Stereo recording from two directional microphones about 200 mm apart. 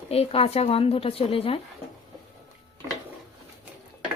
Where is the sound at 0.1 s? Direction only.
30° left (ahead or behind).